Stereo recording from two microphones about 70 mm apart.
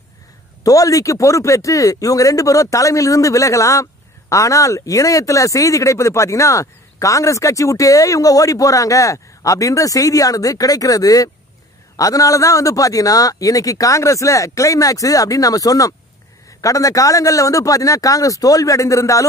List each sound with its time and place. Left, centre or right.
0.7 s a man's voice: left